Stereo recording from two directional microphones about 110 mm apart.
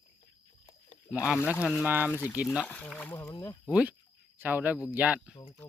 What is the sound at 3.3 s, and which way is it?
Speech, 35° left (ahead or behind).